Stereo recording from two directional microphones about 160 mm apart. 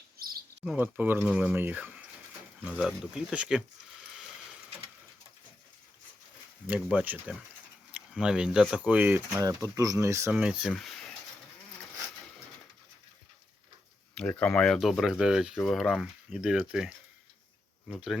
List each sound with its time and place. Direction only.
0.2 s bird: 70° right (ahead or behind)
0.6 s speech: 10° right (ahead or behind)
6.7 s speech: 10° right (ahead or behind)
10.3 s speech: 5° right (ahead or behind)
14.2 s speech: 10° left (ahead or behind)